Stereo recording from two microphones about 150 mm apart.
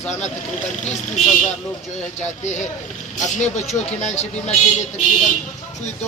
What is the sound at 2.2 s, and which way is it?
Speech, 50° left (ahead or behind).